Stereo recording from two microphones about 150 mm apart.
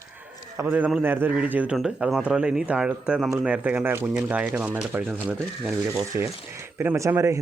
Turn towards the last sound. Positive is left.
turn(degrees=-20)  # may be behind; listen again after turning